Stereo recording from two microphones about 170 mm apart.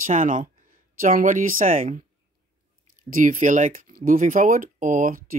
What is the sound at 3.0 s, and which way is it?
Speech, 50° right (ahead or behind).